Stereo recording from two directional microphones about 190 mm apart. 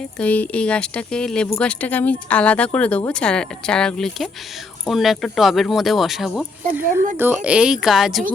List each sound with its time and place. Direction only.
0.2 s speech: 5° left (ahead or behind)